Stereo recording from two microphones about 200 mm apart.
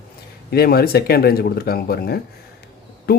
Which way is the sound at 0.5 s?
50° left (ahead or behind).